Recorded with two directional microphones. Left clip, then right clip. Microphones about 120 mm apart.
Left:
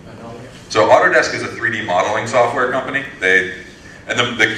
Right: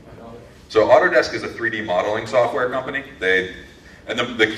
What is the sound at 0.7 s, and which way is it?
A man's voice, 45° left (ahead or behind).